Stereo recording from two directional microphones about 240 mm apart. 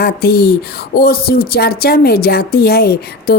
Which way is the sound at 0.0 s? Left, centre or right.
Left.